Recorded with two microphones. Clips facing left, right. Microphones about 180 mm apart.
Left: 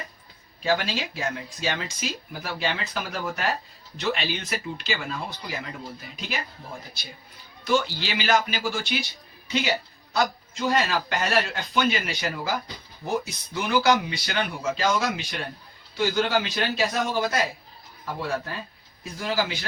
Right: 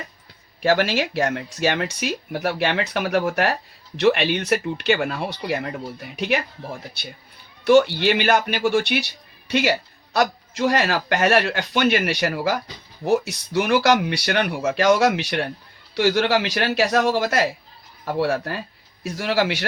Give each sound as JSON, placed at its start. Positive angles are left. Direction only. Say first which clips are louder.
{"t": 0.6, "sound": "speech", "louder": "right 6 dB", "side_deg": -65}
{"t": 7.6, "sound": "speech", "louder": "right 10 dB", "side_deg": -65}